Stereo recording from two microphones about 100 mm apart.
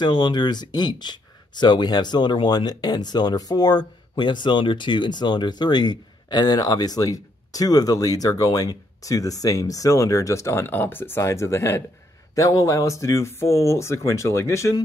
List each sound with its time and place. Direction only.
0.0 s speech: 50° left (ahead or behind); by 14.7 s 30° left (ahead or behind)